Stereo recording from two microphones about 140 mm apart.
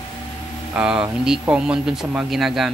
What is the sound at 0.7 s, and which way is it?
Speech, 5° right (ahead or behind).